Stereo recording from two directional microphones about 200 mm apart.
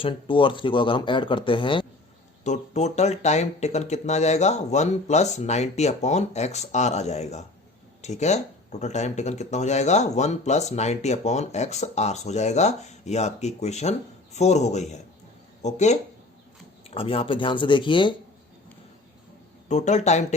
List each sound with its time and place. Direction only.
0.0 s speech: 25° left (ahead or behind)
2.4 s speech: 35° left (ahead or behind)
19.6 s speech: 35° left (ahead or behind)